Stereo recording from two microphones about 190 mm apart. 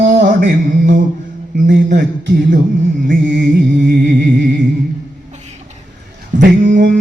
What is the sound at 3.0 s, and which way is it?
Mantra, 65° right (ahead or behind).